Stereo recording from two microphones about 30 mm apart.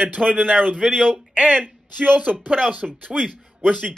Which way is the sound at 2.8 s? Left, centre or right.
Centre.